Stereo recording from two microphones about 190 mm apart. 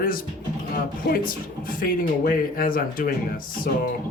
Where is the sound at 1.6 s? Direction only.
50° left (ahead or behind).